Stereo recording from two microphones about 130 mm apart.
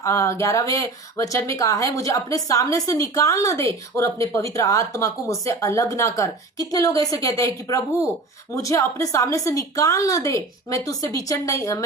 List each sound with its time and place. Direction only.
0.0 s speech: 25° left (ahead or behind)